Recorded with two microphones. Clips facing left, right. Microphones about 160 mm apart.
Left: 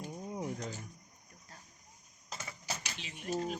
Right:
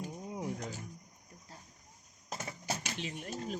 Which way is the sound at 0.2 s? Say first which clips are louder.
Left 2 dB; 5° right (ahead or behind).